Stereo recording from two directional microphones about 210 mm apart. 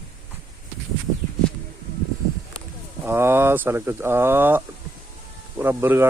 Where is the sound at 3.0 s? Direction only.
10° right (ahead or behind).